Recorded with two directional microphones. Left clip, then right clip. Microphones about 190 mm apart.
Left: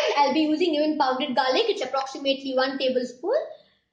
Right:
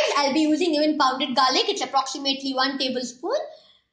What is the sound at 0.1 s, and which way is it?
A woman's voice, 30° right (ahead or behind).